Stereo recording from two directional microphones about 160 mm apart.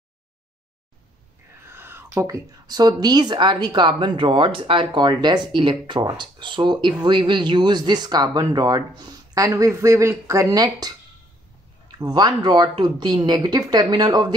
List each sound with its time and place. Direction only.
1.7 s speech: 15° right (ahead or behind)
12.0 s speech: 25° right (ahead or behind)